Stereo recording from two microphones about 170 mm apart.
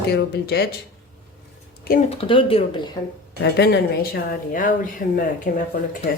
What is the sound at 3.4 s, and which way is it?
A woman's voice, 75° left (ahead or behind).